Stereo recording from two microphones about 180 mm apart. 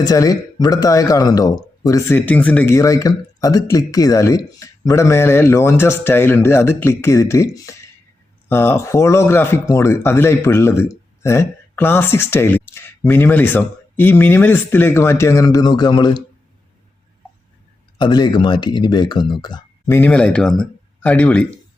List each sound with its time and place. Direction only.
0.0 s speech: 20° left (ahead or behind)
17.9 s speech: 25° left (ahead or behind)
19.9 s speech: 10° left (ahead or behind)